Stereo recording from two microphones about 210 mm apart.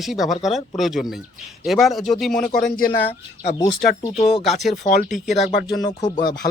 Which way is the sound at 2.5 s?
45° left (ahead or behind).